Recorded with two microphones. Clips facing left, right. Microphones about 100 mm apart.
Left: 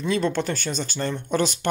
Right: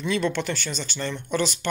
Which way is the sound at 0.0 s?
35° left (ahead or behind).